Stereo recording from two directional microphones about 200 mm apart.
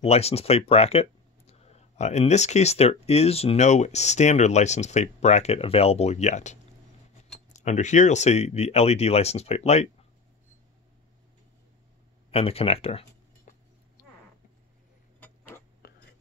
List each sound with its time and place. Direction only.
0.0 s speech: 30° left (ahead or behind)
12.3 s speech: 30° left (ahead or behind)
13.5 s a sound: 40° left (ahead or behind)
15.8 s whispering: 50° left (ahead or behind)